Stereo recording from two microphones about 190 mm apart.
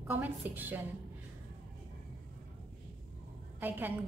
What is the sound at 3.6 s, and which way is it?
Speech, 10° right (ahead or behind).